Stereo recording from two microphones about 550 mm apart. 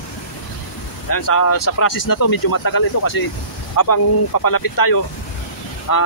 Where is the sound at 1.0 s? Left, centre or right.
Left.